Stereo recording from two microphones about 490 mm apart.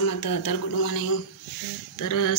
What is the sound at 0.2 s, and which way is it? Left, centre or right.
Speech, left.